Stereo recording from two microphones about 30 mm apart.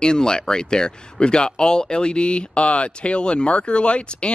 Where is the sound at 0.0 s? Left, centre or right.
Left.